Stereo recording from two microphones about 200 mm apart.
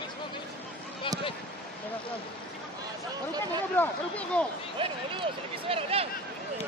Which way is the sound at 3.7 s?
10° left (ahead or behind).